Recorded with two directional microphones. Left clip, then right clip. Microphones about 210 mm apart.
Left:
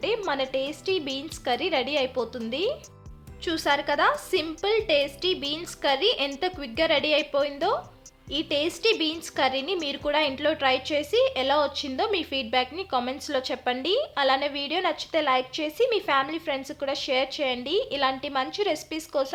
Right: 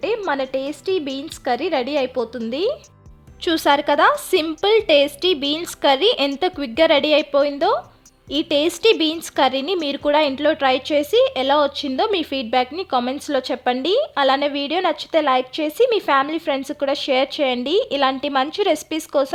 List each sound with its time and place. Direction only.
0.0 s a woman's voice: 30° right (ahead or behind)